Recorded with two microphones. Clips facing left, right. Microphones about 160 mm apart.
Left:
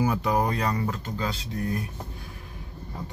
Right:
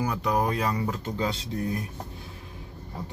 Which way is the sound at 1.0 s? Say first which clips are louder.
Right 2 dB; 25° right (ahead or behind).